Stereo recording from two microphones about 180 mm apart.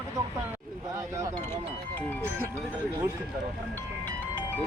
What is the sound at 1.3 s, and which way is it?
Speech, 15° left (ahead or behind).